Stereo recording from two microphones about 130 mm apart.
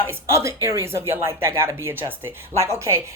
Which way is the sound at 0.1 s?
20° right (ahead or behind).